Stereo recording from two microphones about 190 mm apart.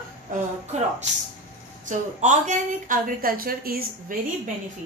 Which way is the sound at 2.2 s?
40° right (ahead or behind).